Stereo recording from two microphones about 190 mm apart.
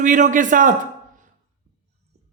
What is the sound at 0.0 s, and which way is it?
Speech, 40° right (ahead or behind).